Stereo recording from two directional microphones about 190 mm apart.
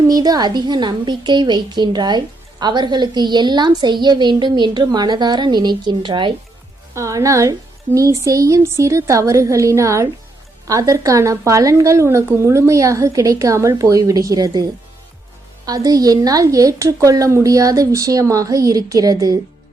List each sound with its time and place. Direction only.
0.1 s a woman's voice: 20° right (ahead or behind)